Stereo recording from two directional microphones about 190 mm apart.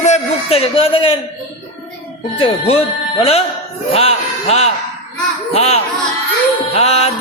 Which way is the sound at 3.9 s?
30° left (ahead or behind).